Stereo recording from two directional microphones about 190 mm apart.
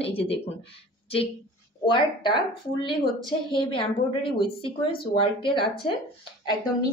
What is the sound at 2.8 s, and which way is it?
A woman's voice, 25° left (ahead or behind).